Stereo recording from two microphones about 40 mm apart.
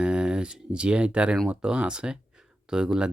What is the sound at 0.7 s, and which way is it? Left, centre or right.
Speech, right.